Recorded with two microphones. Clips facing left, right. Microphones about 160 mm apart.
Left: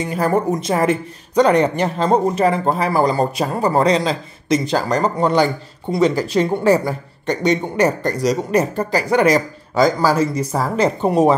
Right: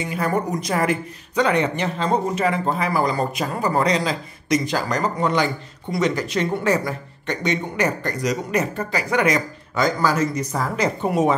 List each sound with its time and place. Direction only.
0.0 s a woman's voice: 35° left (ahead or behind)
1.3 s speech: 40° left (ahead or behind)